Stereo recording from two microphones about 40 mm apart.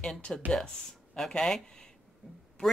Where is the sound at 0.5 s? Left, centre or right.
Centre.